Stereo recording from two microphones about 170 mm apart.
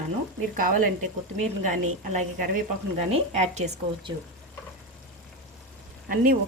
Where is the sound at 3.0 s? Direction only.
40° right (ahead or behind).